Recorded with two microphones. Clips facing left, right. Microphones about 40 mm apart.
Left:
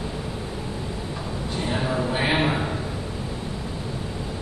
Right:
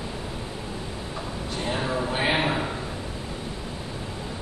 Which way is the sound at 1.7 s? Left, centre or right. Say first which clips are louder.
Left 2 dB; centre.